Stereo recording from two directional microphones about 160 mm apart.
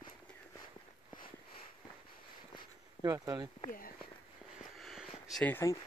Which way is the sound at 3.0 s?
25° right (ahead or behind).